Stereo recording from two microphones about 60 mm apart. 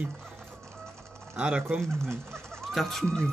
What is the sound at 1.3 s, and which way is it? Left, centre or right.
Speech, centre.